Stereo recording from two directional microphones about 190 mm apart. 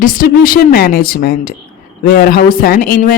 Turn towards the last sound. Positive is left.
turn(degrees=50)  # may be behind; listen again after turning